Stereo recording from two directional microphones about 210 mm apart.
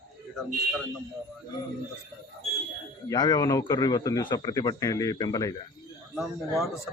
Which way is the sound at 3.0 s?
20° left (ahead or behind).